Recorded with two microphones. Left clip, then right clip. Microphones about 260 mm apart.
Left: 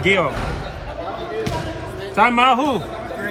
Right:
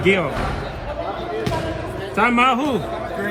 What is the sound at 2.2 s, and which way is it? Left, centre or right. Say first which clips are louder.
Speech: left 2 dB; left.